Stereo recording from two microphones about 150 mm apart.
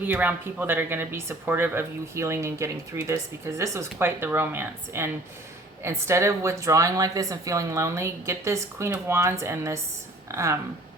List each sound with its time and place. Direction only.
0.0 s a woman's voice: 10° right (ahead or behind)